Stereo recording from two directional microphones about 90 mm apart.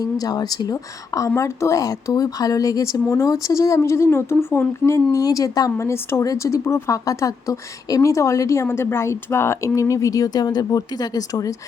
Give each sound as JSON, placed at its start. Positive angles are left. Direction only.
{"t": 0.0, "sound": "a woman's voice", "side_deg": 45}
{"t": 5.7, "sound": "a woman's voice", "side_deg": 30}